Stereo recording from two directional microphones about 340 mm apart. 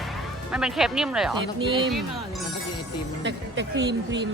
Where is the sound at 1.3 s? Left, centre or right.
Centre.